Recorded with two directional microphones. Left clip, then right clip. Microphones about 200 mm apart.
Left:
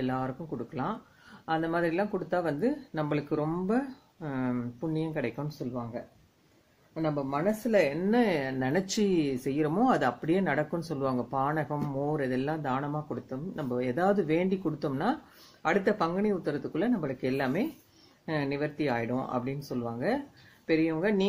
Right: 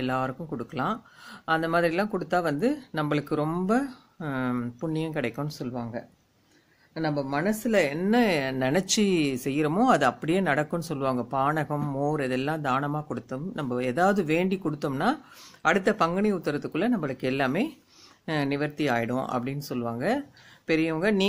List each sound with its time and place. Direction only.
0.0 s speech: 30° right (ahead or behind)